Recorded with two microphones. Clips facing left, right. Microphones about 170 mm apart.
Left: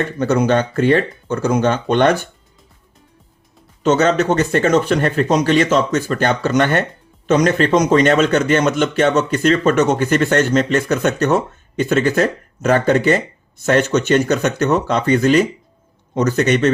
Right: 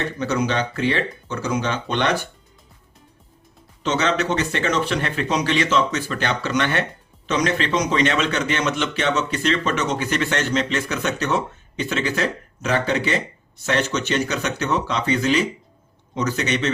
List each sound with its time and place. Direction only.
0.0 s a man's voice: 50° left (ahead or behind)
3.8 s a man's voice: 45° left (ahead or behind)